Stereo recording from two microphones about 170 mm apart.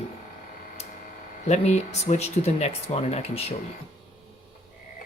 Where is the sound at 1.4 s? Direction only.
40° left (ahead or behind).